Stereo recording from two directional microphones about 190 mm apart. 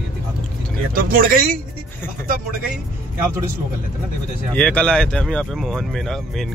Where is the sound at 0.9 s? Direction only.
50° right (ahead or behind).